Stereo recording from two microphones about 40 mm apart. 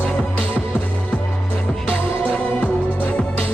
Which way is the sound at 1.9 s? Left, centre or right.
Left.